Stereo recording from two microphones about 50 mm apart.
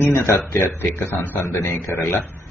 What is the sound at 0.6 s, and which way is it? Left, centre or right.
Speech, left.